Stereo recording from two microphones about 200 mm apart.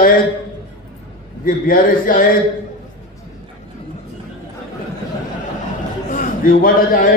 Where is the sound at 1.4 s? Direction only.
45° left (ahead or behind).